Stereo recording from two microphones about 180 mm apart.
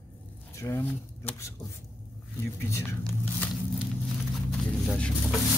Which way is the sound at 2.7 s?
15° left (ahead or behind).